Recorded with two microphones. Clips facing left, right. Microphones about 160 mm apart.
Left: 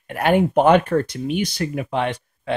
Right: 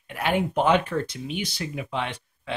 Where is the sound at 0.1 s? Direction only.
55° left (ahead or behind).